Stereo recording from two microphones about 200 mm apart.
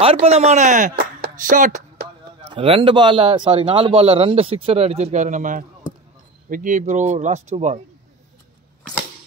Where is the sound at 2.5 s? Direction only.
25° right (ahead or behind).